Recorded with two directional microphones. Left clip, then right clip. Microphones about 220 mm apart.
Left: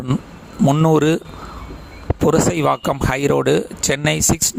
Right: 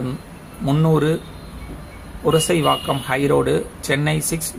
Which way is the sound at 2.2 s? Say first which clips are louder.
Left 1 dB; 50° left (ahead or behind).